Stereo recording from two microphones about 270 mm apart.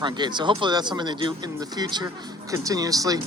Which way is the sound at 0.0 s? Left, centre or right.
Centre.